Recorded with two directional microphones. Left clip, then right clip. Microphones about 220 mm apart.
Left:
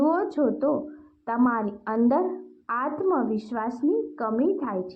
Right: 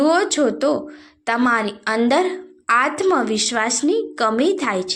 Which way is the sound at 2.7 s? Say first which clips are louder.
Right 9 dB; 35° right (ahead or behind).